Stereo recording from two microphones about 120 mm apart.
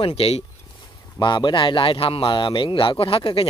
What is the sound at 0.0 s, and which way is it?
Speech, 55° left (ahead or behind).